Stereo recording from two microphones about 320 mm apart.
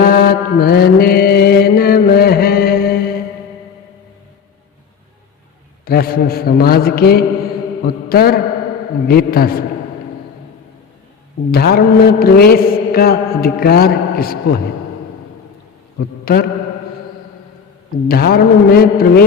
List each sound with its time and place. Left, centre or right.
0.0 s music: left
5.8 s mantra: left
11.5 s mantra: left
16.2 s mantra: left
17.9 s mantra: left